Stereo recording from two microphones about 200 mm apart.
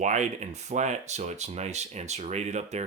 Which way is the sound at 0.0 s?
35° right (ahead or behind).